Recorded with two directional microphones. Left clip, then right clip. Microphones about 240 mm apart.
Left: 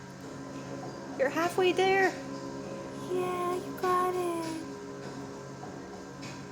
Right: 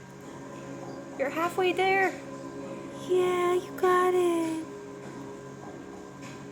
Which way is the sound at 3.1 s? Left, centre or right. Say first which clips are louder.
Right 7 dB; right.